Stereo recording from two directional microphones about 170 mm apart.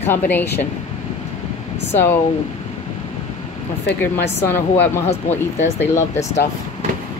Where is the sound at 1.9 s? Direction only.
15° left (ahead or behind).